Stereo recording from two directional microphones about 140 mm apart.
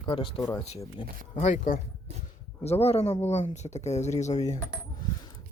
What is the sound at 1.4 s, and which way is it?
Speech, 70° left (ahead or behind).